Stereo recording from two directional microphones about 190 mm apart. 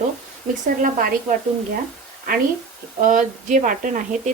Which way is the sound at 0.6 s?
45° right (ahead or behind).